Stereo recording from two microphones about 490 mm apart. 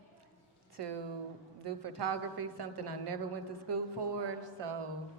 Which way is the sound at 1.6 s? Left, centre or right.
Right.